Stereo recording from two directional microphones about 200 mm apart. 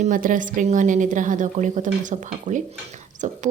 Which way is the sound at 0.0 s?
40° right (ahead or behind).